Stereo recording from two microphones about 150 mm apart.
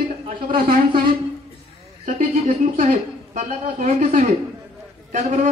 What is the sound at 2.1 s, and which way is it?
Speech, 65° right (ahead or behind).